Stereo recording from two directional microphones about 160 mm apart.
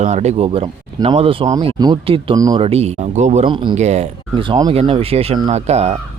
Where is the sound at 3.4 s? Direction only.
30° right (ahead or behind).